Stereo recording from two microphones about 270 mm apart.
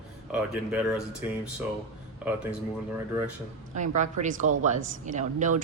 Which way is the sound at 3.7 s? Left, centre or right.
Right.